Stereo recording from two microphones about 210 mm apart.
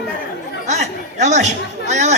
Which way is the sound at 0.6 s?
35° right (ahead or behind).